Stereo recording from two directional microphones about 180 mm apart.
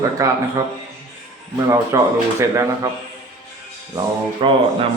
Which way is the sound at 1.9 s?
15° right (ahead or behind).